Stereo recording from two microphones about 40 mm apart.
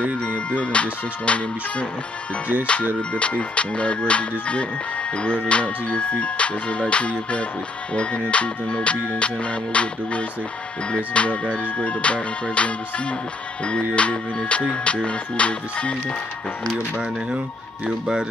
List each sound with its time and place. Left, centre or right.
0.0 s music: left
1.2 s speech: left
3.0 s speech: left
7.9 s music: left
11.1 s speech: left
13.9 s music: left
17.8 s speech: right